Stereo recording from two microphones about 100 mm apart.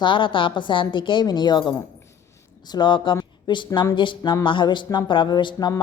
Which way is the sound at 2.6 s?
45° left (ahead or behind).